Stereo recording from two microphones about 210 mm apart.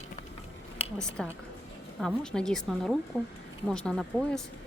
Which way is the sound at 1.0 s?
5° left (ahead or behind).